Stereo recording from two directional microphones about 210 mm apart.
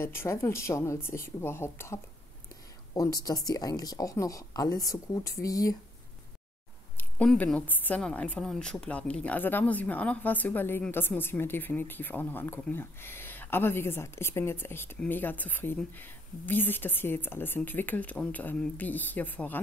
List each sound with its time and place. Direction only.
0.0 s speech: 10° left (ahead or behind)
7.0 s speech: 5° left (ahead or behind)